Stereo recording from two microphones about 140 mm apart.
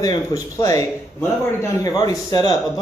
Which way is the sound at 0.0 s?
25° left (ahead or behind).